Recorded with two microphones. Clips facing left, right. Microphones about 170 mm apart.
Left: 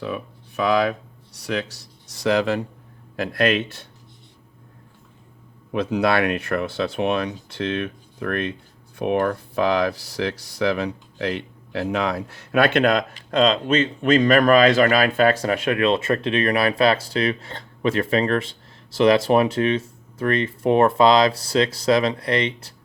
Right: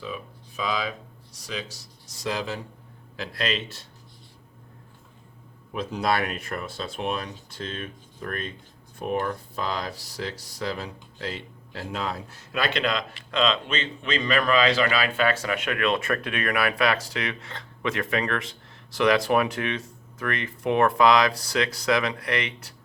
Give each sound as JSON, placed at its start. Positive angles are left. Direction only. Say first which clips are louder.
{"t": 0.0, "sound": "speech", "louder": "left 7 dB", "side_deg": 65}
{"t": 5.7, "sound": "speech", "louder": "left 6 dB", "side_deg": 75}